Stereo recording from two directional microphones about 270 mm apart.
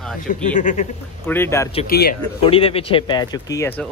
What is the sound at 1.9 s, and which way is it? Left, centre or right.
Speech, left.